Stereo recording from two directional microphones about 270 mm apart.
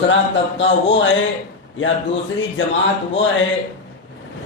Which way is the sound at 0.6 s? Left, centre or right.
Left.